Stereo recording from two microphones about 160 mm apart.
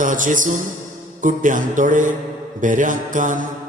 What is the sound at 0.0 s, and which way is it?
Mantra, 55° right (ahead or behind).